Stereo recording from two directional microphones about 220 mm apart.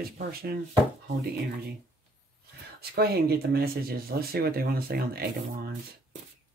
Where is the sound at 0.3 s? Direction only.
45° right (ahead or behind).